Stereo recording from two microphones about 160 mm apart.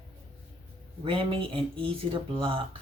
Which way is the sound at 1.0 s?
35° right (ahead or behind).